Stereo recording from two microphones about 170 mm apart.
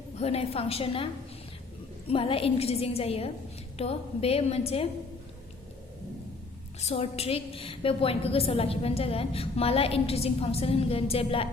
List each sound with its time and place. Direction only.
0.2 s a woman's voice: 35° left (ahead or behind)
2.0 s a woman's voice: 35° left (ahead or behind)
6.7 s a woman's voice: 35° left (ahead or behind)